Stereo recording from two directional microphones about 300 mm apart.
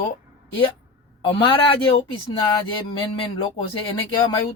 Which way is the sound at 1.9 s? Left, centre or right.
Centre.